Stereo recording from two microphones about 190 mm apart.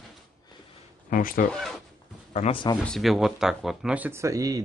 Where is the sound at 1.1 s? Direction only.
45° left (ahead or behind).